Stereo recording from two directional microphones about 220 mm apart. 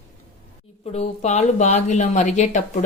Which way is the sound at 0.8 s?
30° left (ahead or behind).